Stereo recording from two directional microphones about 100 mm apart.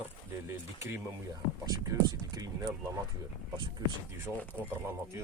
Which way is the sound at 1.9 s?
40° right (ahead or behind).